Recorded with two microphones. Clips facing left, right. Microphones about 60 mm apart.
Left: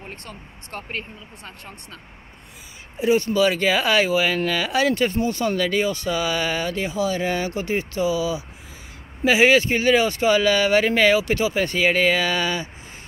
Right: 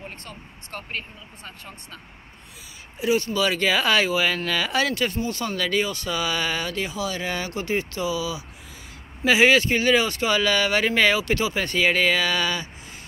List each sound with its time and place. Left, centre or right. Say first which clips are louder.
0.2 s speech: left 2 dB; left
3.0 s speech: left 4 dB; left
5.1 s speech: left 5 dB; left
5.4 s speech: left 2 dB; centre